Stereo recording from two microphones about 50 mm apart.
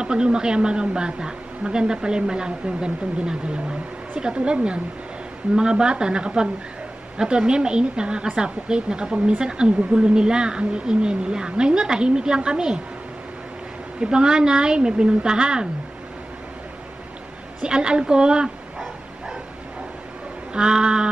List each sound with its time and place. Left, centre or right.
0.0 s a woman's voice: centre
13.9 s a woman's voice: centre
17.6 s a woman's voice: centre
20.5 s a woman's voice: centre